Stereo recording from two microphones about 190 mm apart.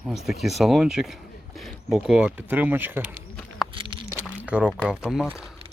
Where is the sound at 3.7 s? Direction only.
25° right (ahead or behind).